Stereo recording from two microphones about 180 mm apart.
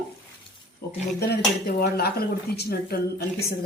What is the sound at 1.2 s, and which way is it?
Speech, 60° left (ahead or behind).